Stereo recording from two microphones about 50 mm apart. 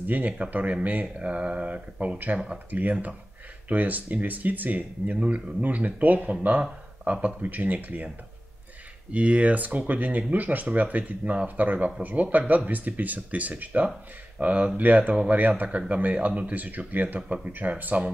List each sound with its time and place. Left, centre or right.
0.0 s speech: right
9.1 s speech: right